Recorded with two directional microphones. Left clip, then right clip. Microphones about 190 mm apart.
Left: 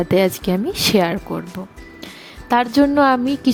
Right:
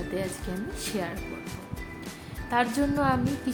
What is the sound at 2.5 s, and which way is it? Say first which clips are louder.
A woman's voice: left 11 dB; 50° left (ahead or behind).